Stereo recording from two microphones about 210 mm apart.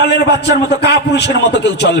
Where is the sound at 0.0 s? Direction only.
55° left (ahead or behind).